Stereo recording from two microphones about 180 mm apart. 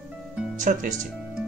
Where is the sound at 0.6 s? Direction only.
45° right (ahead or behind).